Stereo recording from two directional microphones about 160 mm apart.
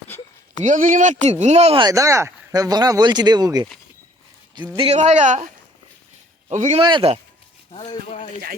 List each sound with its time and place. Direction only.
0.1 s a sound: 15° left (ahead or behind)
0.6 s speech: 55° right (ahead or behind)
1.8 s speech: 20° right (ahead or behind)
4.8 s speech: 45° right (ahead or behind)
6.5 s speech: 50° right (ahead or behind)
6.7 s speech: 30° right (ahead or behind)
7.7 s speech: 35° left (ahead or behind)